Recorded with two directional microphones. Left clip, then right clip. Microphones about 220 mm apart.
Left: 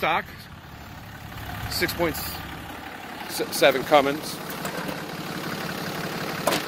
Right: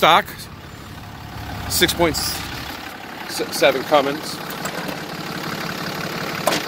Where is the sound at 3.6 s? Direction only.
25° left (ahead or behind).